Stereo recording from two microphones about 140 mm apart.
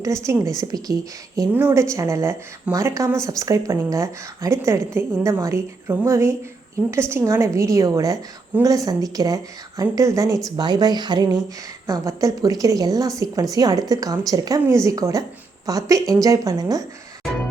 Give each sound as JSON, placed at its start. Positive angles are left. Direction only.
{"t": 0.3, "sound": "a woman's voice", "side_deg": -20}